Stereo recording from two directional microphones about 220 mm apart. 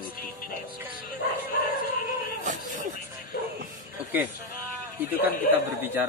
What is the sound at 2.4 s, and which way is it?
Speech, 35° right (ahead or behind).